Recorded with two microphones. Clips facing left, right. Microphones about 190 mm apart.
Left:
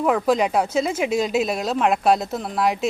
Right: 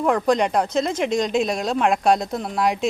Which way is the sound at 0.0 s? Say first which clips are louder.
Even; 5° left (ahead or behind).